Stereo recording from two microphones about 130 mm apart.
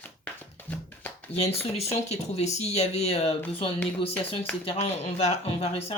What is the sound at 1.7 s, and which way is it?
Speech, 55° left (ahead or behind).